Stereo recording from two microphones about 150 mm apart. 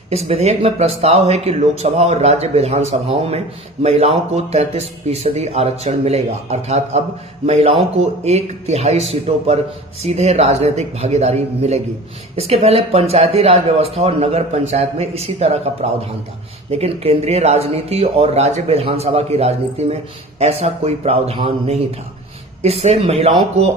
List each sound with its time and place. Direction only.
0.1 s speech: 45° right (ahead or behind)